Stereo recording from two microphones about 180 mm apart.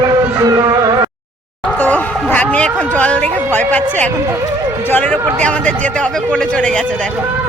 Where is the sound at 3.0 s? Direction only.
5° left (ahead or behind).